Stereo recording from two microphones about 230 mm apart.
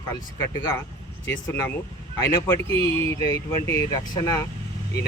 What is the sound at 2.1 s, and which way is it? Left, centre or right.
Speech, centre.